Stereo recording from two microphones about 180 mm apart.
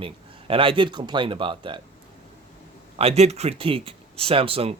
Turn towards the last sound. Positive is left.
turn(degrees=-30)  # may be behind; listen again after turning